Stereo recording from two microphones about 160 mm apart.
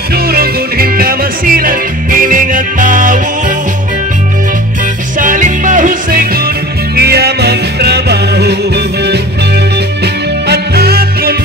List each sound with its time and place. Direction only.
0.1 s music: 70° right (ahead or behind); by 3.5 s 55° right (ahead or behind)
5.2 s music: 55° right (ahead or behind)
7.0 s music: 90° right; by 11.3 s 75° right (ahead or behind)